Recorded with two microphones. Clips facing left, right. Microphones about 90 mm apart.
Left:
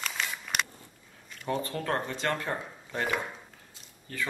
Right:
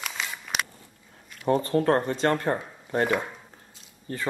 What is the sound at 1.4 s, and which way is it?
Speech, 35° right (ahead or behind).